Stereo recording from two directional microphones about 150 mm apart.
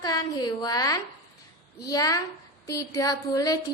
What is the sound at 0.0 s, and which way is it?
A woman's voice, 25° left (ahead or behind).